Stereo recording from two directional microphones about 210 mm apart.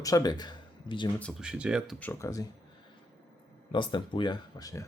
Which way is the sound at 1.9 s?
10° left (ahead or behind).